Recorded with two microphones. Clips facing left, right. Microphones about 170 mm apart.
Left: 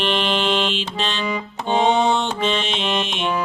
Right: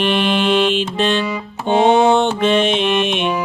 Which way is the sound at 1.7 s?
55° right (ahead or behind).